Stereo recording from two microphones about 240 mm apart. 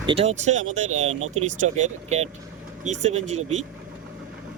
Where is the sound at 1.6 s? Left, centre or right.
Right.